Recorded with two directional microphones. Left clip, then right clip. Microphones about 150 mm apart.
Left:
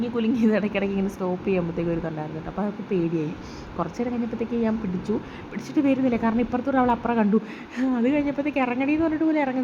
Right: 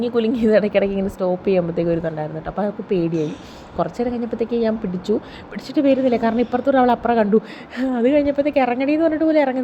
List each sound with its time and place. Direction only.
0.0 s speech: 30° right (ahead or behind)